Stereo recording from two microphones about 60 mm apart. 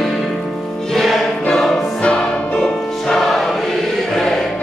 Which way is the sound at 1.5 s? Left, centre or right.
Centre.